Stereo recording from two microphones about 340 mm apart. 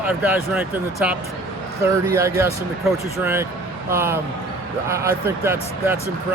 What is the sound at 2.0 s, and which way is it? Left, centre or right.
Speech, centre.